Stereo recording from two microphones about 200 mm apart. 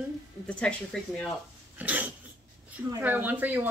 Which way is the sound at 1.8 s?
5° right (ahead or behind).